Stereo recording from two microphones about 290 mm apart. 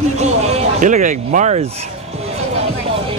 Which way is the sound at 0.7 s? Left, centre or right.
Right.